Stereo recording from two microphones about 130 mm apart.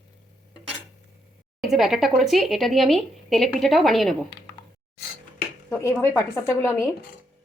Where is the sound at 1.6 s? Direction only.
Centre (ahead or behind).